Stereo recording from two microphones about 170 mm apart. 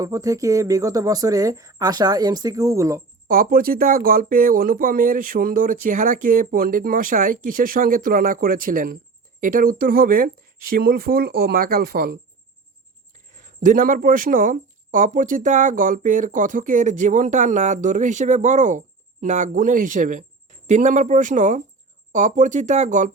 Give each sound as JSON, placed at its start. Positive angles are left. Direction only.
{"t": 0.0, "sound": "a woman's voice", "side_deg": -20}
{"t": 3.2, "sound": "speech", "side_deg": -55}
{"t": 13.3, "sound": "speech", "side_deg": -50}